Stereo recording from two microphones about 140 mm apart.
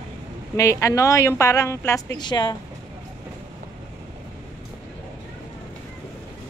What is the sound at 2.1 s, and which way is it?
Speech, 30° left (ahead or behind).